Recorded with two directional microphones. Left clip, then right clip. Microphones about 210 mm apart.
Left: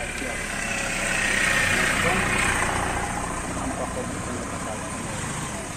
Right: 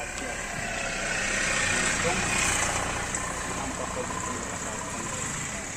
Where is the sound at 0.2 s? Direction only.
30° right (ahead or behind); by 2.9 s 55° right (ahead or behind).